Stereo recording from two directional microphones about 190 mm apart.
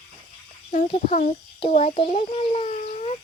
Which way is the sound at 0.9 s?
35° left (ahead or behind).